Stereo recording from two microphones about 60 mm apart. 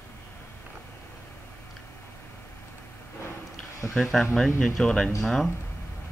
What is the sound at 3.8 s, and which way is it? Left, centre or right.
Speech, centre.